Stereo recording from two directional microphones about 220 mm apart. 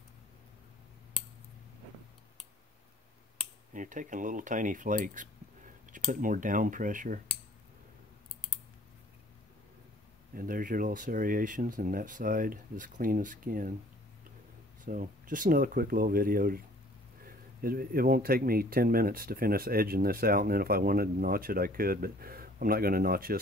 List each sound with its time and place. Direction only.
3.7 s speech: 35° right (ahead or behind)
10.3 s speech: 40° right (ahead or behind)
14.9 s speech: 40° right (ahead or behind)